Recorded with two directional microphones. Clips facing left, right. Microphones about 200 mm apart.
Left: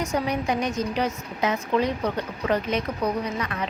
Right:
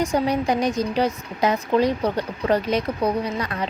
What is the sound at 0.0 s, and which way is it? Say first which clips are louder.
Speech: right 4 dB; 30° right (ahead or behind).